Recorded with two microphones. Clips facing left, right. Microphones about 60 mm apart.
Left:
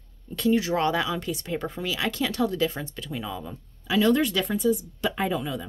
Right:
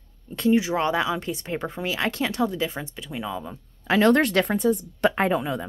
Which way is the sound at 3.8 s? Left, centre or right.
Right.